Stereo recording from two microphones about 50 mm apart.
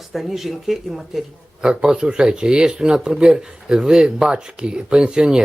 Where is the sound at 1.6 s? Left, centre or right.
Centre.